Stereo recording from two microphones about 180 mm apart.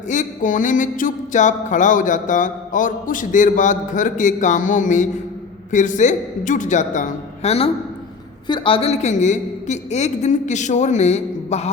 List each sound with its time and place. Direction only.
0.1 s music: 45° left (ahead or behind)
8.4 s a woman's voice: 25° left (ahead or behind)